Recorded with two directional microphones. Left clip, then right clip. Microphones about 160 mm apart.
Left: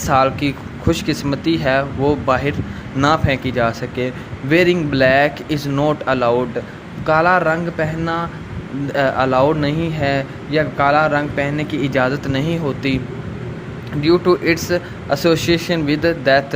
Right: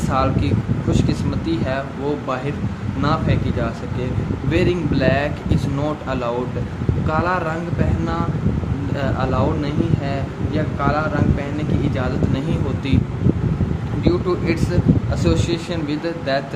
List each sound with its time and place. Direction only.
0.1 s speech: 40° left (ahead or behind)
14.0 s speech: 40° left (ahead or behind)